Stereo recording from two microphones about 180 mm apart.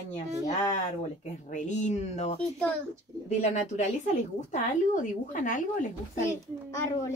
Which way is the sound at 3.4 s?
40° left (ahead or behind).